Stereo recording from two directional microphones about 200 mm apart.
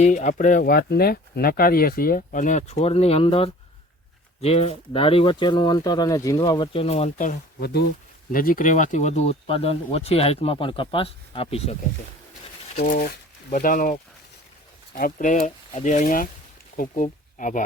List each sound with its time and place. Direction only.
0.0 s speech: 35° left (ahead or behind)
12.7 s speech: 45° left (ahead or behind)